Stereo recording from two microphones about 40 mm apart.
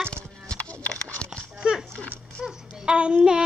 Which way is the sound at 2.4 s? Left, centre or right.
Right.